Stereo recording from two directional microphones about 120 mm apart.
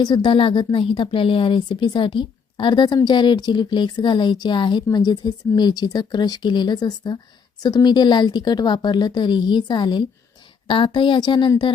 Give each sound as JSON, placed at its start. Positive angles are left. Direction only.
{"t": 0.0, "sound": "speech", "side_deg": 40}